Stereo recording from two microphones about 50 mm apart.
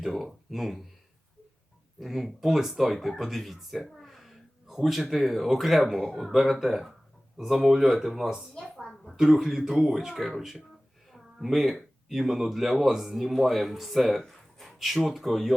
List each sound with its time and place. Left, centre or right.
0.0 s speech: centre
2.0 s speech: centre
8.7 s a woman's voice: centre
9.1 s speech: centre